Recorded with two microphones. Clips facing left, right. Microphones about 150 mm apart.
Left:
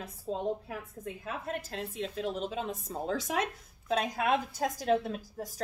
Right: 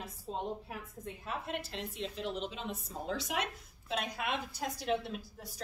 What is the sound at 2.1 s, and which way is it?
A woman's voice, 45° left (ahead or behind).